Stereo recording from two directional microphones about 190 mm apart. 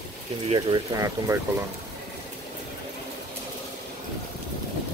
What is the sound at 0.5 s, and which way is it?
Speech, 25° right (ahead or behind).